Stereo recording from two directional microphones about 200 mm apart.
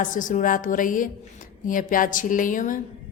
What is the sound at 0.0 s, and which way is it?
A woman's voice, 40° left (ahead or behind).